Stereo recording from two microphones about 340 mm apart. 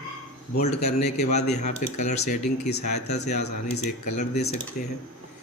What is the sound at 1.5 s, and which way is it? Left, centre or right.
Speech, left.